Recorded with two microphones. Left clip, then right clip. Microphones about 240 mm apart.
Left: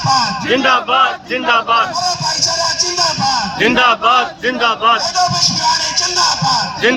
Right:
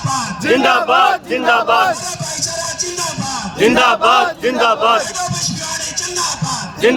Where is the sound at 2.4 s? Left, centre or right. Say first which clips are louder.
Left 5 dB; centre.